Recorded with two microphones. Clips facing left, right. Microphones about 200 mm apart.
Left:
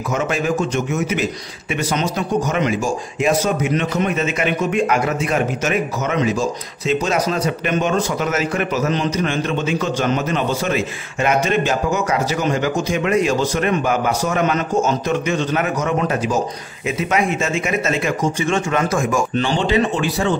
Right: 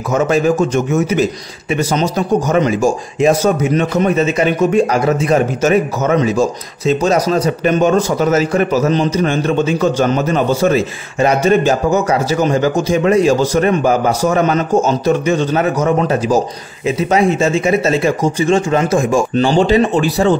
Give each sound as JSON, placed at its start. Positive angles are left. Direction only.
{"t": 0.1, "sound": "speech", "side_deg": -45}